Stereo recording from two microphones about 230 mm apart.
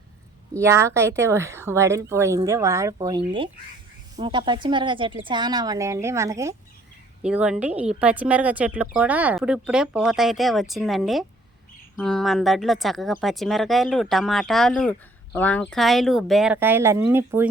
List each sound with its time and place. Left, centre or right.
0.5 s speech: centre